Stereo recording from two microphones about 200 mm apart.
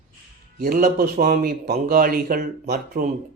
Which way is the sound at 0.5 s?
45° right (ahead or behind).